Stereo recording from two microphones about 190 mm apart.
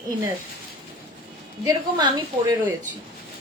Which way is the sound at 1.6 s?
20° right (ahead or behind).